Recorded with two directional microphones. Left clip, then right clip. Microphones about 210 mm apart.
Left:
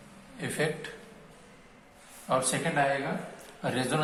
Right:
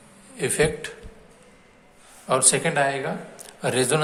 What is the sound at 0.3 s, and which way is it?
Speech, 50° right (ahead or behind).